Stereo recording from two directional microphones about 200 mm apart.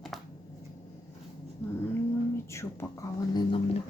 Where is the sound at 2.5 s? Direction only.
15° left (ahead or behind).